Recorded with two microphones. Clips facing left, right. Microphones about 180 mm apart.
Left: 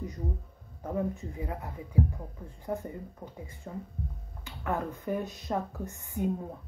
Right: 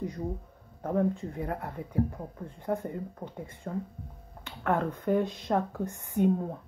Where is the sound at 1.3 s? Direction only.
55° right (ahead or behind).